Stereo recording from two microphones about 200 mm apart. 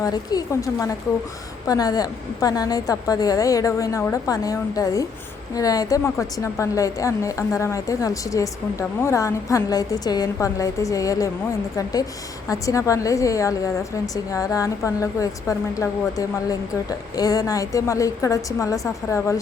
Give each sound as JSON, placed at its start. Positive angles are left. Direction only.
{"t": 0.0, "sound": "a woman's voice", "side_deg": 20}